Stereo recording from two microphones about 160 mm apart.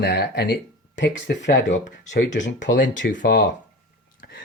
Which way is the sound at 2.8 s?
55° left (ahead or behind).